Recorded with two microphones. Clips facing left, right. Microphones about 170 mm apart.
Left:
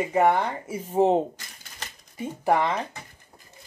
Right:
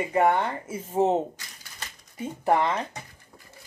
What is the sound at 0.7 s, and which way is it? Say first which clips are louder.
Speech: left 3 dB; 15° left (ahead or behind).